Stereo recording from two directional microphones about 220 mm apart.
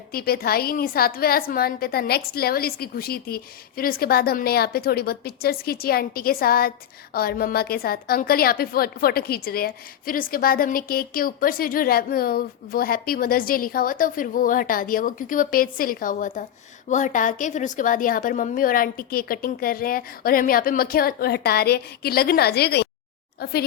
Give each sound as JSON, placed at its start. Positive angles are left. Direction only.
{"t": 0.1, "sound": "a woman's voice", "side_deg": 45}